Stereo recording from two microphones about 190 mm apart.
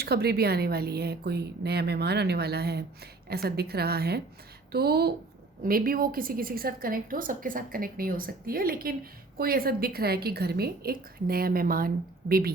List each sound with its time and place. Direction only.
0.0 s a woman's voice: 55° right (ahead or behind)